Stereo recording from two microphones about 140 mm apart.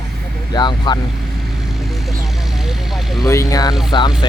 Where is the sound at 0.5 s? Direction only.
30° left (ahead or behind).